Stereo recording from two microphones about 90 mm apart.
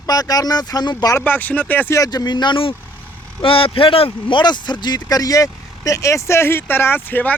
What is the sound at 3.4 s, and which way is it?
Speech, 85° left.